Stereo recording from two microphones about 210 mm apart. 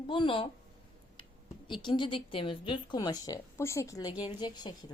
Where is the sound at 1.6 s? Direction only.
25° left (ahead or behind).